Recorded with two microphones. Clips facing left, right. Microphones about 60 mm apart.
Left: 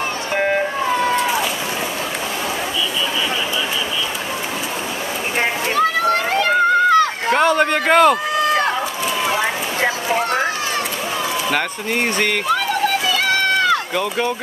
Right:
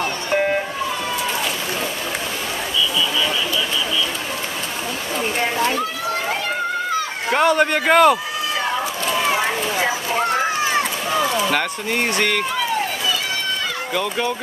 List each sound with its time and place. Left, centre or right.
0.3 s vehicle: centre
5.7 s children playing: left
7.3 s a man's voice: centre
9.1 s a sound: centre
10.0 s a sound: centre
11.4 s speech: centre
13.0 s run: left
13.9 s speech: centre